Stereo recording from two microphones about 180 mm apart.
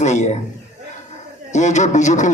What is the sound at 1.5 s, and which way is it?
Speech, 40° left (ahead or behind).